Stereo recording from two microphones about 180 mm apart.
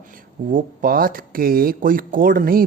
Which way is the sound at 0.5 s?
50° right (ahead or behind).